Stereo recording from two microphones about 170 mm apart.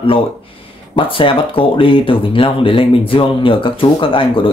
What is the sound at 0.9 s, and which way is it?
Speech, 30° left (ahead or behind).